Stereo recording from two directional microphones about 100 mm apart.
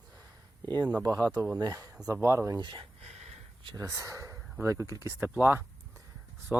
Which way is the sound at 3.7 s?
30° right (ahead or behind).